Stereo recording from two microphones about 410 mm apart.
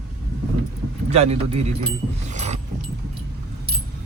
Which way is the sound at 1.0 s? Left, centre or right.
Centre.